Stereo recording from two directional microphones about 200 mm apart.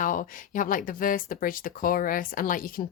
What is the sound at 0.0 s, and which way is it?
Speech, 40° left (ahead or behind).